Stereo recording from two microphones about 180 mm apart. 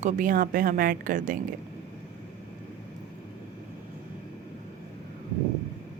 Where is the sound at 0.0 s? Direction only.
50° right (ahead or behind).